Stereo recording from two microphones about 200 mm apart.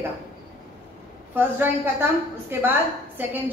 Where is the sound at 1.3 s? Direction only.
10° right (ahead or behind).